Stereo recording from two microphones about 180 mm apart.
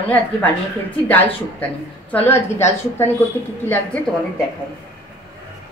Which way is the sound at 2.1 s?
15° left (ahead or behind).